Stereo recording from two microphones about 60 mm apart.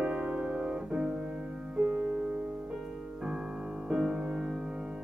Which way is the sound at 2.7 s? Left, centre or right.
Centre.